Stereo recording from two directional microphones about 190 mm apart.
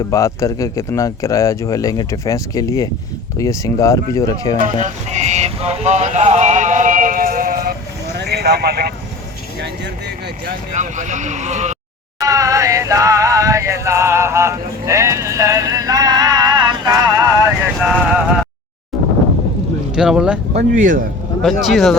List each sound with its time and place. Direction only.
0.1 s speech: 15° left (ahead or behind)
4.6 s speech: 40° right (ahead or behind); by 8.9 s 55° right (ahead or behind)
10.7 s speech: 40° right (ahead or behind)
12.2 s music: 20° right (ahead or behind)
17.7 s a sound: centre (ahead or behind)
20.0 s speech: 5° right (ahead or behind)
20.5 s speech: 40° right (ahead or behind)
21.4 s speech: centre (ahead or behind)